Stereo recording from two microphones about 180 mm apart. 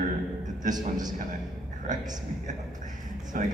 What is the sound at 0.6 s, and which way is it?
Speech, 45° right (ahead or behind).